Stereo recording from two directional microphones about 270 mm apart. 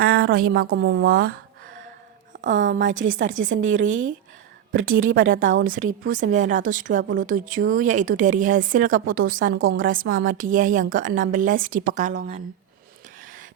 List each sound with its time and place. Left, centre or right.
0.0 s a sound: right
0.5 s a woman's voice: right
2.5 s speech: right
6.0 s a woman's voice: right